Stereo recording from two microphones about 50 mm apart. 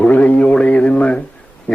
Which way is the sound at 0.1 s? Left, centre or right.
Left.